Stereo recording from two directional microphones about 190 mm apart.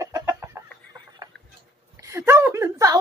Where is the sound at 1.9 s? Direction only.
15° right (ahead or behind).